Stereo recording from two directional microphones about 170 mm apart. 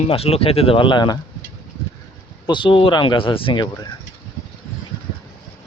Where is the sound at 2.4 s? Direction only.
30° left (ahead or behind).